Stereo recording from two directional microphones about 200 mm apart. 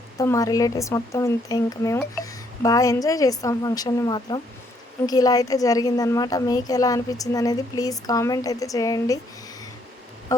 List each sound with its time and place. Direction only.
0.2 s a woman's voice: 15° left (ahead or behind)